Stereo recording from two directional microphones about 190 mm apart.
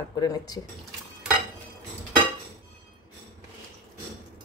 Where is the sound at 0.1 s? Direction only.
20° left (ahead or behind).